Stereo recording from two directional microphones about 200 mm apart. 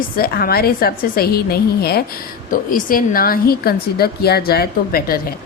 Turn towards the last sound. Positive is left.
turn(degrees=50)  # may be behind; listen again after turning